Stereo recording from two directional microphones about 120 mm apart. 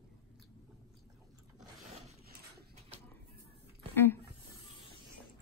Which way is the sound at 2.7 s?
60° right (ahead or behind).